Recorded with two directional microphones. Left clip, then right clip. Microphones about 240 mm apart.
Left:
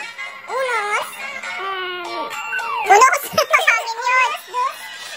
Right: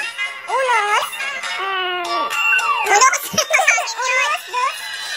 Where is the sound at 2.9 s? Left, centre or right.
Centre.